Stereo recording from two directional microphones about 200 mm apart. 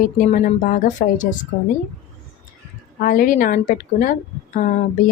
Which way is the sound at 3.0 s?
45° left (ahead or behind).